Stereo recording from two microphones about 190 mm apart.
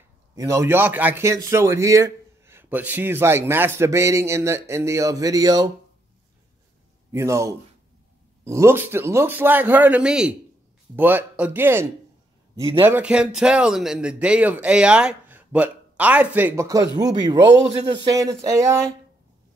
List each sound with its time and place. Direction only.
0.4 s speech: 15° right (ahead or behind)
7.1 s speech: 15° right (ahead or behind)